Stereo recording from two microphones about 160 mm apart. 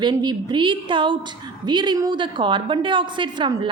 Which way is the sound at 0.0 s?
25° right (ahead or behind).